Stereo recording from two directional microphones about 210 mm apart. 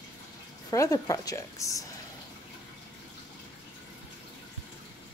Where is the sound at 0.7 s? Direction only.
15° left (ahead or behind).